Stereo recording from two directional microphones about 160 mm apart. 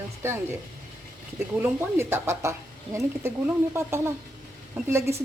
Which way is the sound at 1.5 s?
15° right (ahead or behind).